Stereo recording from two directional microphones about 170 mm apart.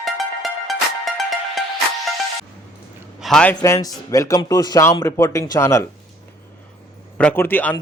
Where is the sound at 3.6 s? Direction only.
20° left (ahead or behind).